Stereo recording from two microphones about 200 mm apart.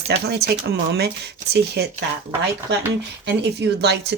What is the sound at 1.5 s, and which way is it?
Speech, 55° right (ahead or behind).